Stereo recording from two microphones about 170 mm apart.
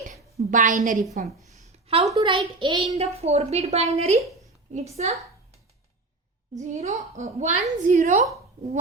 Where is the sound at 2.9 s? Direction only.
40° right (ahead or behind).